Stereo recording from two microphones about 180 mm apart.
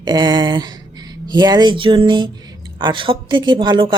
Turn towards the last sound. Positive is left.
turn(degrees=-25)  # may be behind; listen again after turning